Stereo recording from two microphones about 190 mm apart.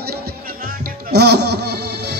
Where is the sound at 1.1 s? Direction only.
60° right (ahead or behind).